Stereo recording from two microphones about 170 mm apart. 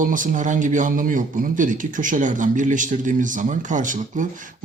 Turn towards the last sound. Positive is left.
turn(degrees=-50)  # may be behind; listen again after turning